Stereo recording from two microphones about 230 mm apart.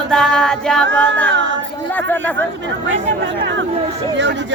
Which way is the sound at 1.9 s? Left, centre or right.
Centre.